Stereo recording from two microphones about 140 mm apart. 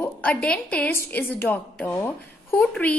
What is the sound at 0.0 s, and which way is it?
A woman's voice, 10° left (ahead or behind).